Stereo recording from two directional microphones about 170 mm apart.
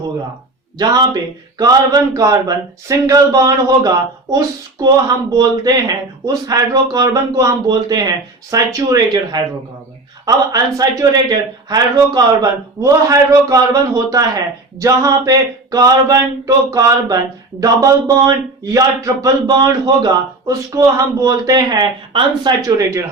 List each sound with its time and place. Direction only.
0.8 s speech: 20° right (ahead or behind)